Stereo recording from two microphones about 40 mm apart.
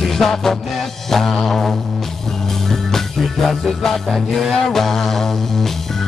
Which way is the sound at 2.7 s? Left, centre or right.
Centre.